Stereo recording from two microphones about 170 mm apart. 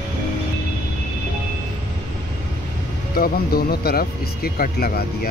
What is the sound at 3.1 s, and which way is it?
Speech, 60° left (ahead or behind).